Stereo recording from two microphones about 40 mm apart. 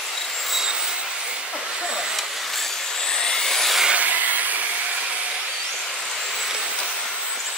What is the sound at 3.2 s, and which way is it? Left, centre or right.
Vehicle, centre.